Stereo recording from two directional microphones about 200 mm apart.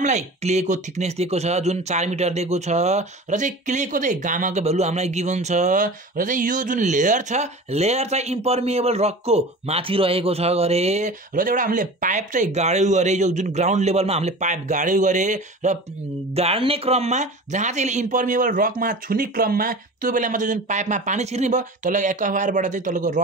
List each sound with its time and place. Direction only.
0.0 s speech: 35° right (ahead or behind)